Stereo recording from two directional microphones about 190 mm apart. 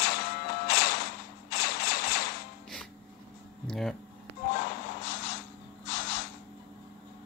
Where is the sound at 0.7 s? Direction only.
55° left (ahead or behind).